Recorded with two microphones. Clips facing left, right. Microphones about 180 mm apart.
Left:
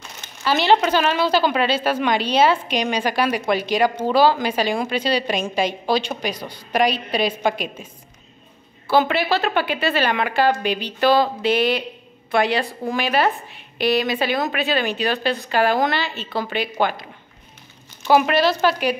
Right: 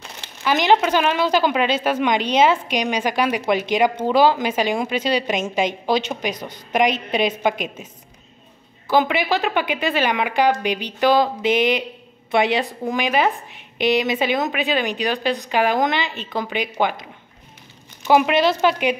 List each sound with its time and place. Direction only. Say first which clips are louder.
0.4 s a woman's voice: even; 15° right (ahead or behind)
8.8 s a woman's voice: even; 15° right (ahead or behind)